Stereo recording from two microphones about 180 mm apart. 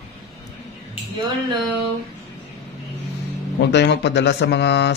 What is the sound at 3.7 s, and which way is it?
Speech, 70° left (ahead or behind).